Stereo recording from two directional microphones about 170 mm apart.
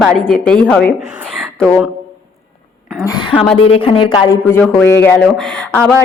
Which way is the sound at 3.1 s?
30° left (ahead or behind).